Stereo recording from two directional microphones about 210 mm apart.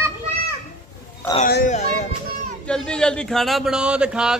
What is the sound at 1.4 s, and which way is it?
Speech, 40° left (ahead or behind).